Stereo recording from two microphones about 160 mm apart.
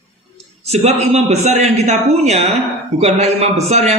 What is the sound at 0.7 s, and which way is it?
A man's voice, 40° right (ahead or behind).